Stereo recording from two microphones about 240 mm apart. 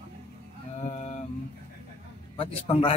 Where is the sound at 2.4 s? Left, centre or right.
Left.